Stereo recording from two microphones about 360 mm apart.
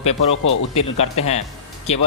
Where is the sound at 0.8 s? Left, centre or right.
Centre.